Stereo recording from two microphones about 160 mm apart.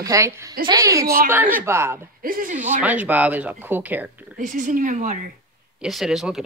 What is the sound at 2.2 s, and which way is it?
Speech, 60° right (ahead or behind).